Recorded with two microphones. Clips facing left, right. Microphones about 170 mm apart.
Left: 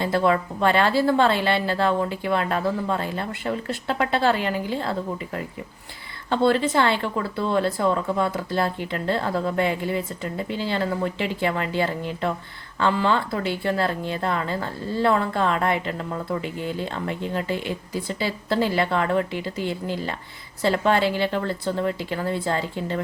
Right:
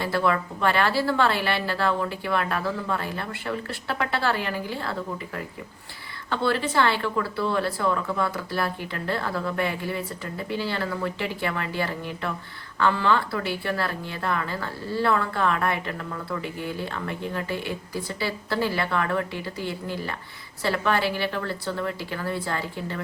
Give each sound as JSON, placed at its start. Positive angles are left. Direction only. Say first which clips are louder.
{"t": 0.0, "sound": "speech", "louder": "left 3 dB", "side_deg": 20}